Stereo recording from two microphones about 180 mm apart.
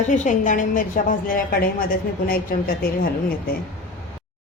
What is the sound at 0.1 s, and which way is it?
Speech, 45° left (ahead or behind).